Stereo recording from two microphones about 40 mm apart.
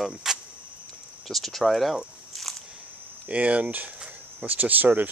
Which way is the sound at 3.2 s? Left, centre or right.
Right.